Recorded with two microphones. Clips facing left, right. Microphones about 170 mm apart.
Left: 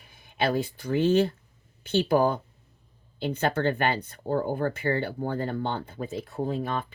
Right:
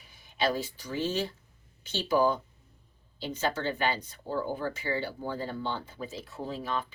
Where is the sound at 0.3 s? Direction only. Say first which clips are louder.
Left 3 dB; 55° left (ahead or behind).